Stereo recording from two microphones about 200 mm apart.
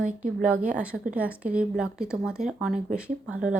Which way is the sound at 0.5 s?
40° right (ahead or behind).